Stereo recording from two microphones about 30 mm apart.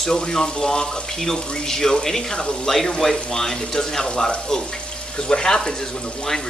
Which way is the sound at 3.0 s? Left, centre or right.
Centre.